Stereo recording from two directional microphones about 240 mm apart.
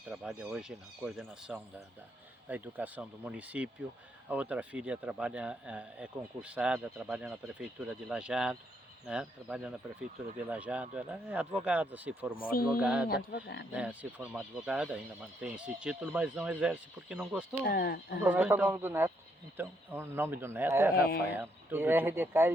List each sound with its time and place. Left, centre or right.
0.1 s speech: centre
13.1 s speech: left
13.7 s speech: centre
17.7 s speech: left
18.2 s speech: centre
20.9 s speech: left
21.3 s speech: centre